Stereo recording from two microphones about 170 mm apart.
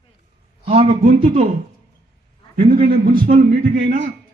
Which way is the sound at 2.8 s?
55° right (ahead or behind).